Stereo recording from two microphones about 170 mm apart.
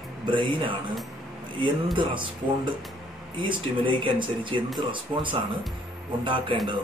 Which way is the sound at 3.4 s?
30° right (ahead or behind).